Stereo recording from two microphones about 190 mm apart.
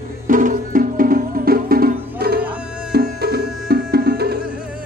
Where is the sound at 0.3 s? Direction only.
45° right (ahead or behind).